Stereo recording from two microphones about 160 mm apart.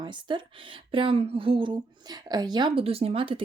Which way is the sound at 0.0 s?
30° right (ahead or behind).